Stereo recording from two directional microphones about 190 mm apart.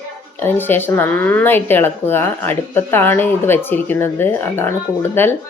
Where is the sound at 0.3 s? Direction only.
10° left (ahead or behind).